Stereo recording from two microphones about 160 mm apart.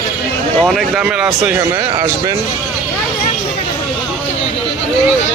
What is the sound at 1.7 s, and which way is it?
Speech, 20° right (ahead or behind).